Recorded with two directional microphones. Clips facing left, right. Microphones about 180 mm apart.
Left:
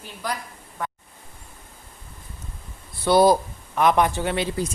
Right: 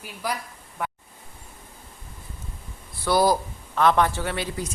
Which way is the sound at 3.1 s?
25° left (ahead or behind).